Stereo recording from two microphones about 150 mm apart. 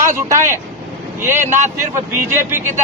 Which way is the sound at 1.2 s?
15° right (ahead or behind).